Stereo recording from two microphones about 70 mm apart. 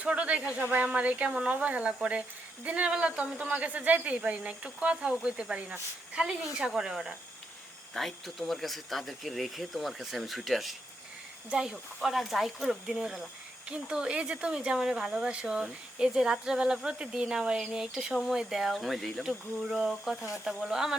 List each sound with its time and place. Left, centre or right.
0.0 s speech: centre
11.5 s speech: centre
12.0 s speech: centre